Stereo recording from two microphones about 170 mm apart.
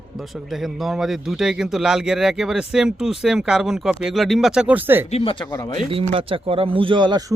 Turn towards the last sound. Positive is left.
turn(degrees=-30)  # may be behind; listen again after turning